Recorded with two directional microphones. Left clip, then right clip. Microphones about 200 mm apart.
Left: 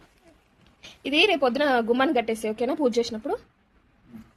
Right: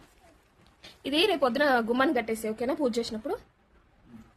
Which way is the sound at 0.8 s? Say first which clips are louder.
Left 5 dB; centre (ahead or behind).